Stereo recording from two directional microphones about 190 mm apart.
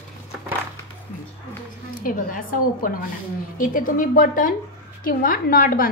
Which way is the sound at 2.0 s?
45° left (ahead or behind).